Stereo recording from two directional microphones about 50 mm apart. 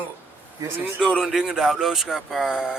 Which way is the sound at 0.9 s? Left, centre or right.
Centre.